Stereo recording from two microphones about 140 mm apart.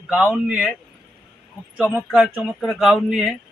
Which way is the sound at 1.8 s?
5° right (ahead or behind).